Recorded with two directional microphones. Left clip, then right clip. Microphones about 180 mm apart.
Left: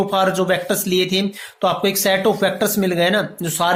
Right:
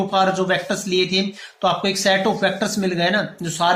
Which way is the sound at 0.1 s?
45° left (ahead or behind).